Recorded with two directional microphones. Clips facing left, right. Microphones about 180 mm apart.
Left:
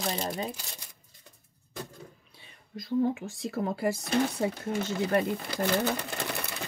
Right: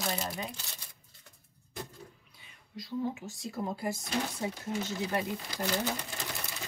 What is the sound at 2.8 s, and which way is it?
Speech, 55° left (ahead or behind).